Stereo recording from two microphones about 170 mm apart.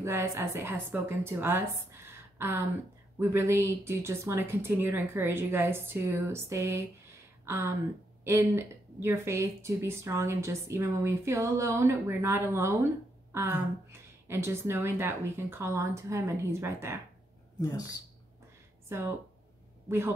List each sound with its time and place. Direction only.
0.0 s speech: 15° right (ahead or behind)
17.6 s speech: 20° left (ahead or behind)
18.9 s speech: 15° right (ahead or behind)